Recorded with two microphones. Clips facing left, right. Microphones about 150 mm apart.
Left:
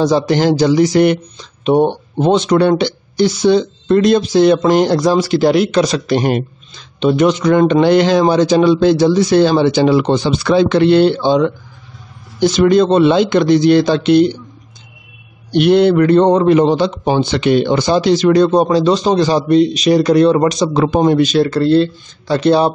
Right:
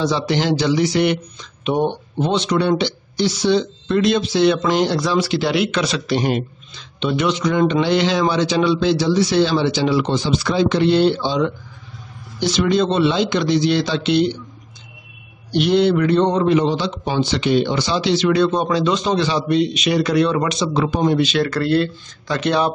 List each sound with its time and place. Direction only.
0.0 s a man's voice: 45° left (ahead or behind)
2.2 s a man's voice: 50° left (ahead or behind)
15.5 s a man's voice: 55° left (ahead or behind)
21.4 s speech: 30° left (ahead or behind)